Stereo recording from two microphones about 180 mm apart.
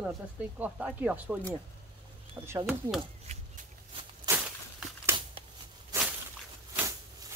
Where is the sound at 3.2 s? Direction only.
35° right (ahead or behind).